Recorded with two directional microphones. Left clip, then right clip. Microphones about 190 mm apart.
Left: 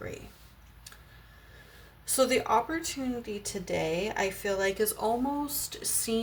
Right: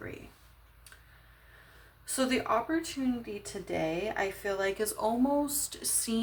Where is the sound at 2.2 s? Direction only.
10° right (ahead or behind).